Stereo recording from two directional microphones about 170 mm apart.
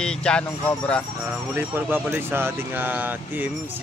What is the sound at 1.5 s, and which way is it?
Speech, 10° right (ahead or behind).